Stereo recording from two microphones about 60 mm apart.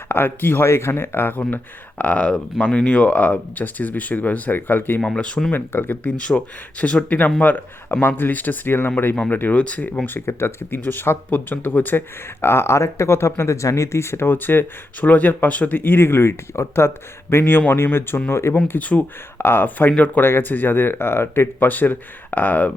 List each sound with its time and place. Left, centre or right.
0.1 s speech: left
4.9 s speech: centre
5.5 s speech: left
6.0 s speech: left
7.4 s speech: left
10.2 s speech: left
18.5 s speech: left
19.4 s speech: left
21.7 s speech: left